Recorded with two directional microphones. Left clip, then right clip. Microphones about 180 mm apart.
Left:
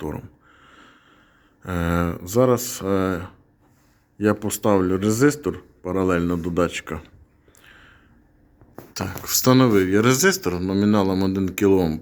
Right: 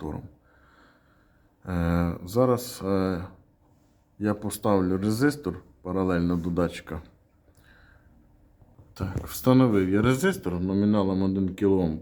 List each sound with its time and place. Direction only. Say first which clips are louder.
1.6 s speech: left 5 dB; 15° left (ahead or behind)
7.6 s a sound: left 9 dB; 15° left (ahead or behind)
8.9 s speech: left 10 dB; 10° left (ahead or behind)